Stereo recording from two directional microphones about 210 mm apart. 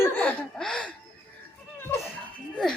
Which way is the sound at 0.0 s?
5° left (ahead or behind).